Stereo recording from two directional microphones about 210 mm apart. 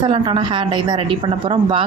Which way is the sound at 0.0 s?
25° right (ahead or behind).